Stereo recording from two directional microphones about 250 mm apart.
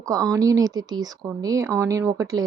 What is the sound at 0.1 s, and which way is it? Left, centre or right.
A woman's voice, centre.